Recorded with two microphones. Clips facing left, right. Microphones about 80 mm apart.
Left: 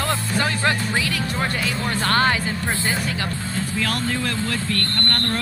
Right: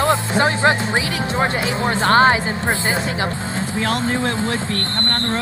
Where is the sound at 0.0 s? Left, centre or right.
Right.